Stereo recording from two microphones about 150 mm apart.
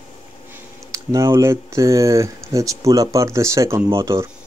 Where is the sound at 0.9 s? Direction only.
20° right (ahead or behind).